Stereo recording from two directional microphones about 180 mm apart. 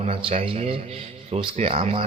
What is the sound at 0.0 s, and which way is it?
Speech, 30° right (ahead or behind).